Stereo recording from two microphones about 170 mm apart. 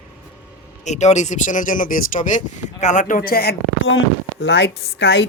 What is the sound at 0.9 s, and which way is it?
Speech, 45° left (ahead or behind).